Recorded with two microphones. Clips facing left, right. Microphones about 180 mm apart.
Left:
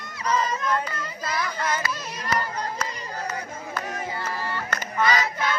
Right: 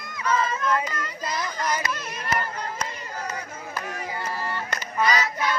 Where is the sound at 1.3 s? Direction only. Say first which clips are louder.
Left 1 dB; 20° right (ahead or behind).